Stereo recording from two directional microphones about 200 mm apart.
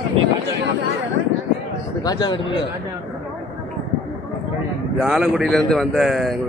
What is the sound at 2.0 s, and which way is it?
Speech, 20° left (ahead or behind).